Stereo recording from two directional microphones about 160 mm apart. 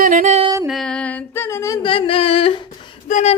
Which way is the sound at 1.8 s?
35° left (ahead or behind).